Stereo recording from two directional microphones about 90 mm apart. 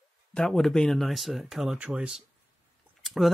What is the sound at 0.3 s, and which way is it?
Speech, 5° left (ahead or behind).